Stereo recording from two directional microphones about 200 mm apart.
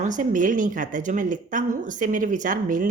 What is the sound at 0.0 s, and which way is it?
A woman's voice, 40° right (ahead or behind).